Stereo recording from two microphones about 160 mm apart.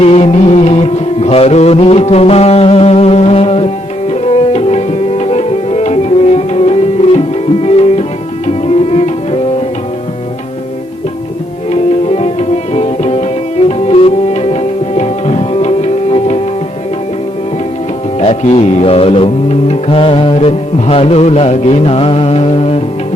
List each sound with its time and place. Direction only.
0.0 s music: 40° left (ahead or behind)
4.1 s tabla: 40° left (ahead or behind)
6.5 s music: 40° left (ahead or behind)
7.6 s tabla: 40° left (ahead or behind)
8.4 s music: 40° left (ahead or behind)
11.7 s music: 40° left (ahead or behind)
18.2 s music: 45° left (ahead or behind)